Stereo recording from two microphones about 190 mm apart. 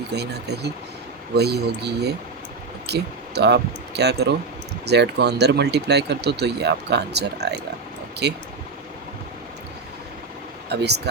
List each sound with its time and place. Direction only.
0.1 s speech: 60° right (ahead or behind)
10.7 s speech: 60° right (ahead or behind)